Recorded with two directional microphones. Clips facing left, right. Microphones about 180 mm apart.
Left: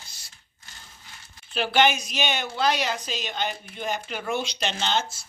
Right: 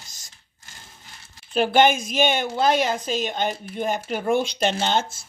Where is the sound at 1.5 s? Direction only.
50° right (ahead or behind).